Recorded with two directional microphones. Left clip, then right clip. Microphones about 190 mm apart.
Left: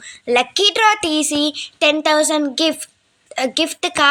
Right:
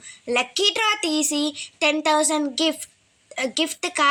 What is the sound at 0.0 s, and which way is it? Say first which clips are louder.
A woman's voice: left 7 dB; 20° left (ahead or behind).